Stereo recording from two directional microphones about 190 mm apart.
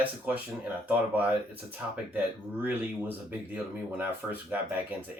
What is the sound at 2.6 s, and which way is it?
Speech, 10° right (ahead or behind).